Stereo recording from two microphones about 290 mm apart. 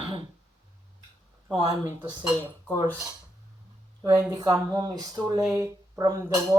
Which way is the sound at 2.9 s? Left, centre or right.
Centre.